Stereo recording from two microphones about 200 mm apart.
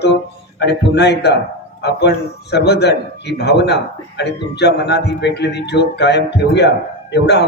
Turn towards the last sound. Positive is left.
turn(degrees=55)  # may be behind; listen again after turning